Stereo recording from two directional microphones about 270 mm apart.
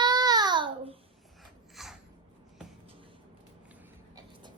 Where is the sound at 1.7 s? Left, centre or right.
Centre.